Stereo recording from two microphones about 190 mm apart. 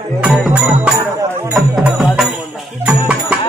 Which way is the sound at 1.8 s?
Centre (ahead or behind).